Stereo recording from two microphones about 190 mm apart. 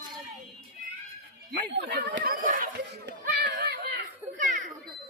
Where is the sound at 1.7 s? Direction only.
60° right (ahead or behind).